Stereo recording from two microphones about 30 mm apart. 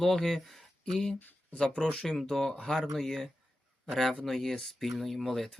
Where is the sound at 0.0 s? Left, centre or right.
Centre.